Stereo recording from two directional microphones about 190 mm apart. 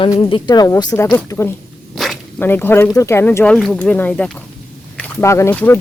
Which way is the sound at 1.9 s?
Centre (ahead or behind).